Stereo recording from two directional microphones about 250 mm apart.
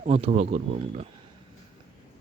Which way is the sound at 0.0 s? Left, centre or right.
Right.